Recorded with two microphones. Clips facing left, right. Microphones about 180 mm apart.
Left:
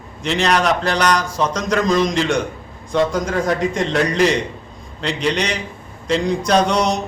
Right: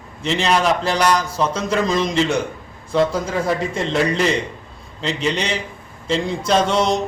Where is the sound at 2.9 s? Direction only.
5° right (ahead or behind).